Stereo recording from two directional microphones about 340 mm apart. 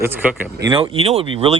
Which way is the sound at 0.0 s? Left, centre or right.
Centre.